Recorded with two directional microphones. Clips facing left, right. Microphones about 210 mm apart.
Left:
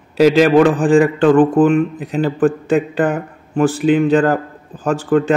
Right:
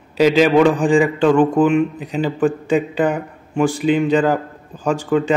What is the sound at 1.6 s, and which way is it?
Speech, 50° left (ahead or behind).